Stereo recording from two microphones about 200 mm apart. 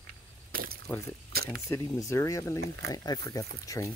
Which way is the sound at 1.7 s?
15° left (ahead or behind).